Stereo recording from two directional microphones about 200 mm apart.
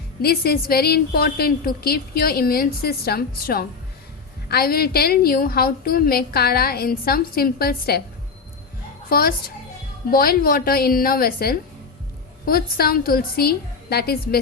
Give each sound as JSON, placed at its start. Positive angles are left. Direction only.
{"t": 0.2, "sound": "a woman's voice", "side_deg": 50}
{"t": 9.0, "sound": "a woman's voice", "side_deg": 50}